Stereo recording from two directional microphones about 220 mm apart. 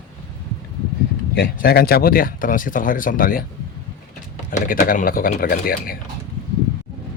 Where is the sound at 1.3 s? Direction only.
45° left (ahead or behind).